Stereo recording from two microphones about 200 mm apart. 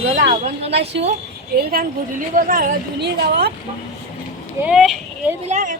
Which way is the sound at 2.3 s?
45° right (ahead or behind).